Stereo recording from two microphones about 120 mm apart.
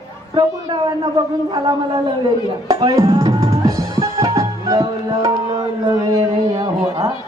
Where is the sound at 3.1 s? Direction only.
30° right (ahead or behind).